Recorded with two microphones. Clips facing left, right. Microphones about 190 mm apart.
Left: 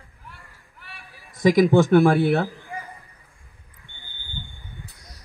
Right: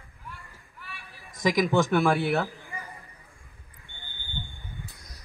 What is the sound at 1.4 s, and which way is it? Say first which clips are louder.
Speech: left 8 dB; 55° left (ahead or behind).